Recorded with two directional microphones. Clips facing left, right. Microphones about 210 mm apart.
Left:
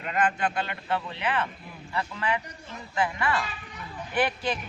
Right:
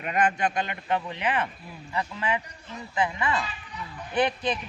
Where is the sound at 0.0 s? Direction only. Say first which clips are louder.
Right 1 dB; 20° right (ahead or behind).